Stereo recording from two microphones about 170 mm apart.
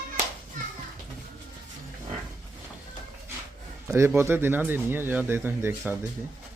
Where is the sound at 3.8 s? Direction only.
15° right (ahead or behind).